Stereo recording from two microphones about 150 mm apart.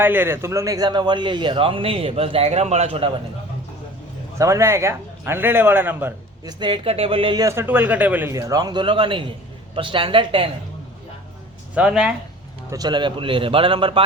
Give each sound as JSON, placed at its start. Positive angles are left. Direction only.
{"t": 0.0, "sound": "a man's voice", "side_deg": -15}
{"t": 4.4, "sound": "a man's voice", "side_deg": -20}
{"t": 6.4, "sound": "a man's voice", "side_deg": -30}
{"t": 7.4, "sound": "a man's voice", "side_deg": -15}
{"t": 11.7, "sound": "a man's voice", "side_deg": -5}
{"t": 12.7, "sound": "a man's voice", "side_deg": -30}